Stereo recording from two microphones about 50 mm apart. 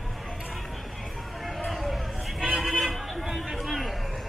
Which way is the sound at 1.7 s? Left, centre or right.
Centre.